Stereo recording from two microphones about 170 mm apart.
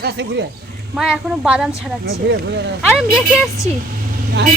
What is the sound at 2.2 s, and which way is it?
Speech, 85° right.